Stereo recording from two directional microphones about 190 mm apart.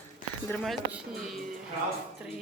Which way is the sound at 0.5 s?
Centre (ahead or behind).